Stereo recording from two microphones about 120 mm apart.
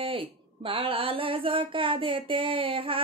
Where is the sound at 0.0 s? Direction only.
50° right (ahead or behind).